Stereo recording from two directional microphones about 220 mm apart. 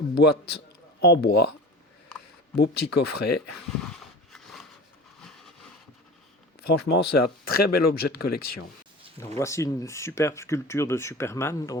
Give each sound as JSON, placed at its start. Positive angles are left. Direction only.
{"t": 0.1, "sound": "a man's voice", "side_deg": 50}
{"t": 2.6, "sound": "speech", "side_deg": 45}
{"t": 4.3, "sound": "wood", "side_deg": 0}
{"t": 6.6, "sound": "speech", "side_deg": 45}
{"t": 9.4, "sound": "speech", "side_deg": 15}